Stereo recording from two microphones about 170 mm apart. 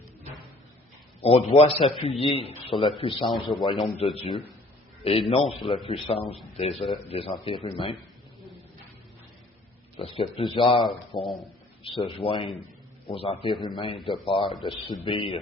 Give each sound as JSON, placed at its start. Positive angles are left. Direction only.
{"t": 1.2, "sound": "a man's voice", "side_deg": 35}
{"t": 10.0, "sound": "a man's voice", "side_deg": 35}